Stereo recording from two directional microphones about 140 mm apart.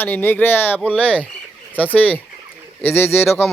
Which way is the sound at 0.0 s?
15° left (ahead or behind).